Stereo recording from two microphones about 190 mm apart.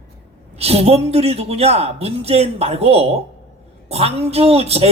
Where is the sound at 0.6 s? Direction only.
35° right (ahead or behind).